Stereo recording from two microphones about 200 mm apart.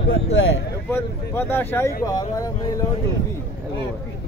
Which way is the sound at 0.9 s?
10° left (ahead or behind).